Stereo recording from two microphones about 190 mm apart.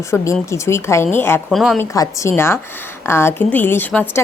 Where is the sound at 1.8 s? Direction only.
15° left (ahead or behind).